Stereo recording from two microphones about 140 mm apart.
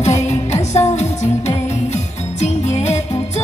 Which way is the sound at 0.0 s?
55° left (ahead or behind).